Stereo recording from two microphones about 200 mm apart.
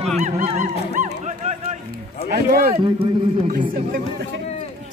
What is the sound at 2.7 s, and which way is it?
Speech, 30° right (ahead or behind).